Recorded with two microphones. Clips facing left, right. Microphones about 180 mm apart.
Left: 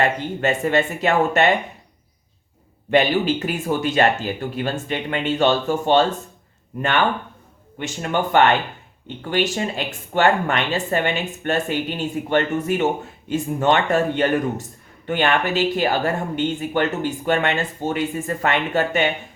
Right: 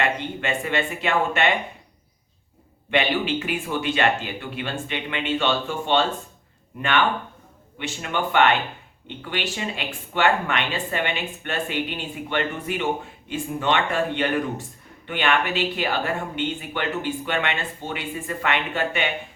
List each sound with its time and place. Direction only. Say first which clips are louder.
0.0 s speech: left 5 dB; 40° left (ahead or behind)
2.9 s speech: left 5 dB; 40° left (ahead or behind)
7.8 s speech: left 4 dB; 45° left (ahead or behind)